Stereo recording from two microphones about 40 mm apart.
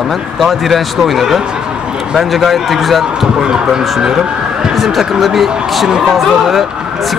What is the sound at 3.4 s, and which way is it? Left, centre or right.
Speech, centre.